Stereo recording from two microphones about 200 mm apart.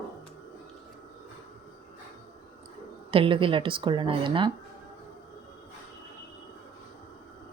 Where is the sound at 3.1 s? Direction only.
25° right (ahead or behind).